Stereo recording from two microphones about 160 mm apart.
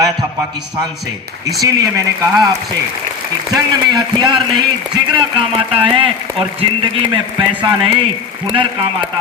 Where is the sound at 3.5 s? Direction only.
25° right (ahead or behind).